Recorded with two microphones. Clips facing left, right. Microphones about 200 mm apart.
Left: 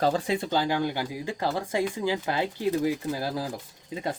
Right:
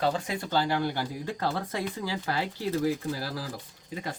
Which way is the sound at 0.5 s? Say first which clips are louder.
Right 2 dB; 15° left (ahead or behind).